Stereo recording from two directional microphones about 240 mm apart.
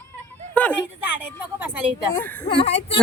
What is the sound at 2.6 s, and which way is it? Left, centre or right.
Speech, left.